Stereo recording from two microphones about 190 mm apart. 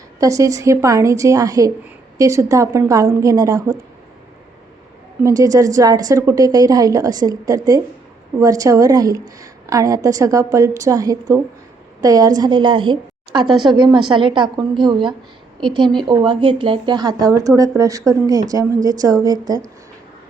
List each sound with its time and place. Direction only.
0.2 s a woman's voice: 15° right (ahead or behind)
5.2 s a woman's voice: 20° right (ahead or behind)